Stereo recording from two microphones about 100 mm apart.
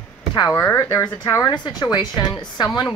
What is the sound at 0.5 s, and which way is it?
Speech, 25° left (ahead or behind).